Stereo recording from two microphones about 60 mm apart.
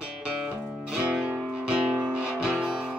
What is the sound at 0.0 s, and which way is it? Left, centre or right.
Music, centre.